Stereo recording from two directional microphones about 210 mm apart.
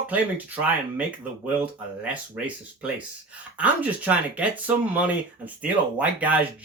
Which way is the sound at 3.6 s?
5° right (ahead or behind).